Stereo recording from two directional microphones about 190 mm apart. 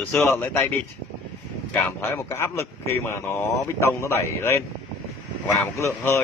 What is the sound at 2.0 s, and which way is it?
Speech, 15° left (ahead or behind).